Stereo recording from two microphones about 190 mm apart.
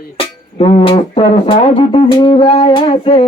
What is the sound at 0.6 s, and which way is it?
Music, 30° left (ahead or behind).